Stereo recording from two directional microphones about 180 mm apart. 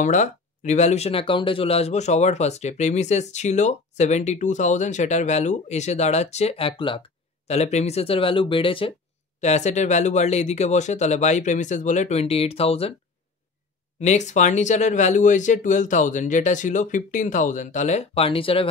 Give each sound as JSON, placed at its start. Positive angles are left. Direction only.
{"t": 0.0, "sound": "speech", "side_deg": 45}
{"t": 9.4, "sound": "speech", "side_deg": 40}
{"t": 14.0, "sound": "speech", "side_deg": 40}